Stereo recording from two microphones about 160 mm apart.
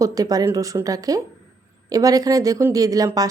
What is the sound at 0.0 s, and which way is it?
A woman's voice, 20° right (ahead or behind).